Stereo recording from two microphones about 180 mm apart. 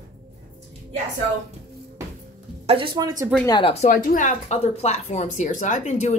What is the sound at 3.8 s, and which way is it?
A woman's voice, 45° left (ahead or behind).